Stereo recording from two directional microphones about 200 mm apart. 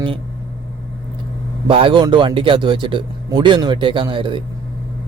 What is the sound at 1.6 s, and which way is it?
A man's voice, 25° right (ahead or behind).